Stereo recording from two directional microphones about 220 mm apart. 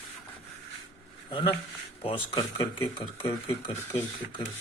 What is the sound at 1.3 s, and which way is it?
Speech, 25° left (ahead or behind).